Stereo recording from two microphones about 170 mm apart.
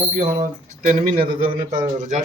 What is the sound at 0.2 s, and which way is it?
Speech, 50° right (ahead or behind).